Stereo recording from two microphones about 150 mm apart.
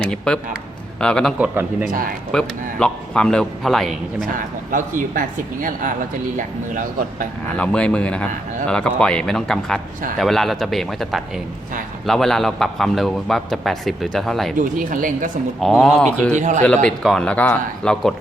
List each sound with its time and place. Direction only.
0.0 s a man's voice: 5° left (ahead or behind)
2.3 s a man's voice: 5° left (ahead or behind)
4.4 s speech: 65° right (ahead or behind)
7.6 s a man's voice: 5° left (ahead or behind)
14.6 s speech: 65° right (ahead or behind)
15.6 s a man's voice: centre (ahead or behind)
16.3 s speech: 55° right (ahead or behind)
16.6 s speech: 5° left (ahead or behind)